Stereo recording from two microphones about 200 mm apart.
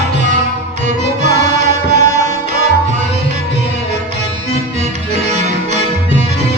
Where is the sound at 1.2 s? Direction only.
35° right (ahead or behind).